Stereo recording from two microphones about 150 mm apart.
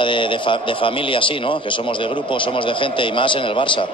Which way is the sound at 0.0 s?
35° left (ahead or behind).